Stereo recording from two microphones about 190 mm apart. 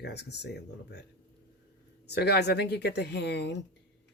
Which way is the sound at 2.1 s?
60° left (ahead or behind).